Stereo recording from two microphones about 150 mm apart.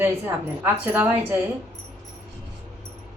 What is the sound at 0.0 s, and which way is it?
Speech, 15° right (ahead or behind).